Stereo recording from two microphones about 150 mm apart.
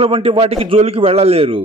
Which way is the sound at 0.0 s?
35° right (ahead or behind).